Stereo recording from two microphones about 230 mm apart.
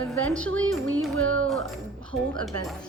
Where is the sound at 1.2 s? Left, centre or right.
Right.